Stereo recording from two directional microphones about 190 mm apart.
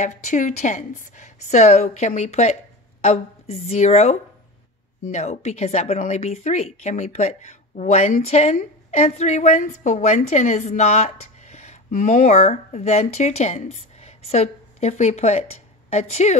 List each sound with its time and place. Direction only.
0.0 s a woman's voice: 40° left (ahead or behind)